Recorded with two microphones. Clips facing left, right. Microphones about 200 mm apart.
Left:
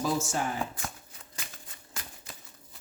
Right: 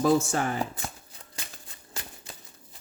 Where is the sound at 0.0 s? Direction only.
60° right (ahead or behind).